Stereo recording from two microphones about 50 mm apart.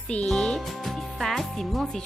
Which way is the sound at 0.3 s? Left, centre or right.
Centre.